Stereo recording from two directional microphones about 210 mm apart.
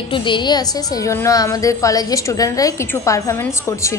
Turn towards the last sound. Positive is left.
turn(degrees=15)  # may be behind; listen again after turning